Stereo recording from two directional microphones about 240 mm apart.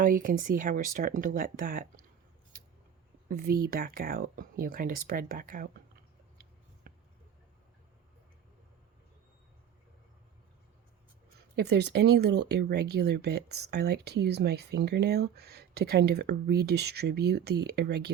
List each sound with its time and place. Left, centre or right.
0.0 s speech: right
3.2 s speech: right
6.8 s a sound: right
11.5 s speech: right